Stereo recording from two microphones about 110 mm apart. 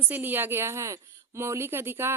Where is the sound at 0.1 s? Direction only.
20° right (ahead or behind).